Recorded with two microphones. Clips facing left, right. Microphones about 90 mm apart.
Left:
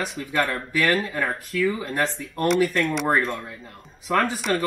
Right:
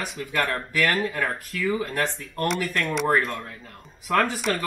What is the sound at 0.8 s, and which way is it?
Speech, 20° left (ahead or behind).